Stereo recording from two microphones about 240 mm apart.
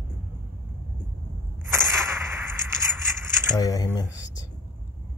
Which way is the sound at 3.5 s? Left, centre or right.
Centre.